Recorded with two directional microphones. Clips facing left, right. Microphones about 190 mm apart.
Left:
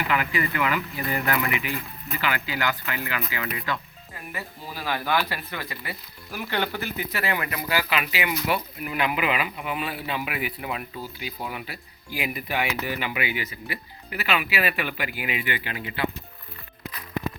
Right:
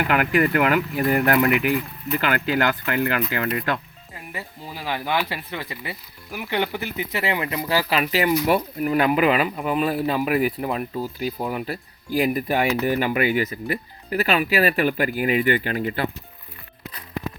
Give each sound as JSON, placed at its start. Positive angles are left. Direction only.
{"t": 0.1, "sound": "speech", "side_deg": -55}
{"t": 4.3, "sound": "speech", "side_deg": -20}